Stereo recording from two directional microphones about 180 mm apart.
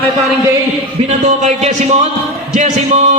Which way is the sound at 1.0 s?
40° right (ahead or behind).